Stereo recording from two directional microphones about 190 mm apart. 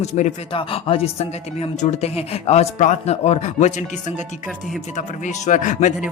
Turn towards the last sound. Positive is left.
turn(degrees=40)  # may be behind; listen again after turning